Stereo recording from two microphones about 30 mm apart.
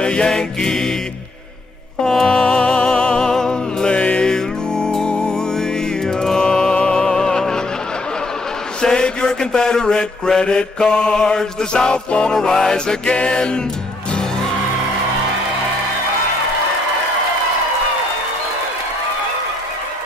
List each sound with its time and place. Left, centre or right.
0.0 s music: left
0.3 s music: left
2.0 s music: left
3.9 s music: left
4.3 s music: left
8.8 s mantra: left
11.9 s music: left
12.4 s music: left